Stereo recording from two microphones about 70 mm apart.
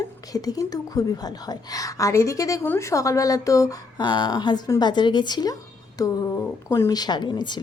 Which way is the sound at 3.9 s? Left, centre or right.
Left.